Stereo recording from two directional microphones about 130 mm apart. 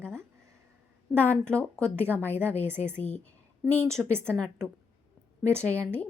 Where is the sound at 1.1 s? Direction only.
10° right (ahead or behind).